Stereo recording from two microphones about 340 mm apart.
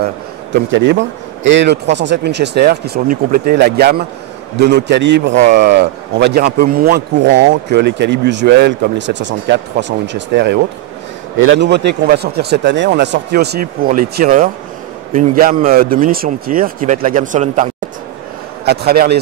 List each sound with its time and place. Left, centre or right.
0.7 s a man's voice: right
15.7 s speech: right
18.7 s speech: right